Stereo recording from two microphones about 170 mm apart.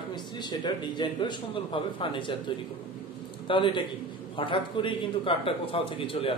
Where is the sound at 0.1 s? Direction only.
25° left (ahead or behind).